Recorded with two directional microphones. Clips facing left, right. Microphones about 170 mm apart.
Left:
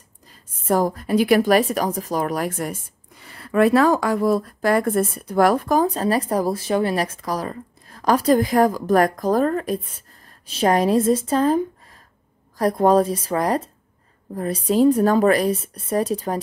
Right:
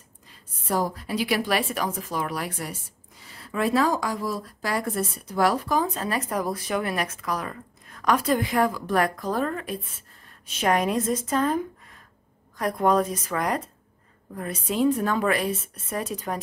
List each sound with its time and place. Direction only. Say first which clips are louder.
0.3 s a woman's voice: left 7 dB; 50° left (ahead or behind); by 16.3 s 30° left (ahead or behind)